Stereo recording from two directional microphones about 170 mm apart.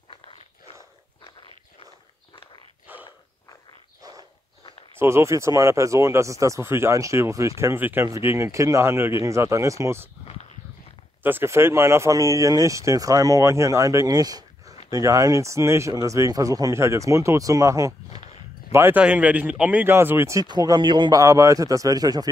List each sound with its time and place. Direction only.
2.9 s dog: 10° right (ahead or behind)
4.9 s speech: 15° right (ahead or behind)
11.2 s speech: 15° right (ahead or behind)